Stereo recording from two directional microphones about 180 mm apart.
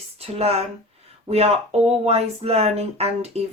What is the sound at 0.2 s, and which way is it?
Speech, 35° right (ahead or behind).